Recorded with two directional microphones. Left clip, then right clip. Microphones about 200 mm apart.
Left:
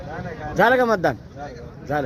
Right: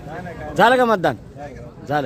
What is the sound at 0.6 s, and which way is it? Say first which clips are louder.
A man's voice: right 2 dB; 5° right (ahead or behind).